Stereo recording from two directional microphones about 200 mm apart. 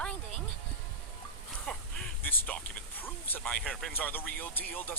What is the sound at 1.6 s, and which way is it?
Speech, 5° left (ahead or behind).